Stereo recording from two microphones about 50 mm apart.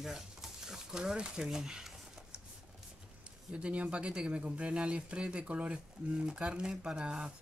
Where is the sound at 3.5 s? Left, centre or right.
Right.